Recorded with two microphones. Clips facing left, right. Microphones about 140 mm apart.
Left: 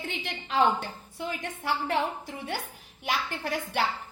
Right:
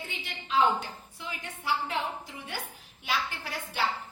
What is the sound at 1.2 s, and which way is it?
Speech, 50° left (ahead or behind).